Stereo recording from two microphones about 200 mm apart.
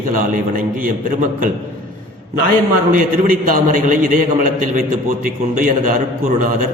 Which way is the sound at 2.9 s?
40° right (ahead or behind).